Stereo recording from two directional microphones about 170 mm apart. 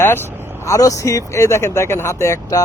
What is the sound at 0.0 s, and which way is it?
Speech, 15° left (ahead or behind).